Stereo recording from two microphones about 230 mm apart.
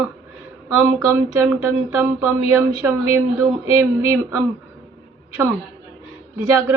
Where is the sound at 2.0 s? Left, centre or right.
Centre.